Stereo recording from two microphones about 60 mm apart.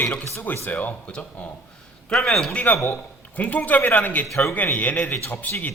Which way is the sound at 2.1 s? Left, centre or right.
Centre.